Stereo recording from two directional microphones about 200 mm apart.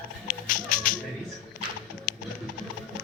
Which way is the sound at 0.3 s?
45° left (ahead or behind).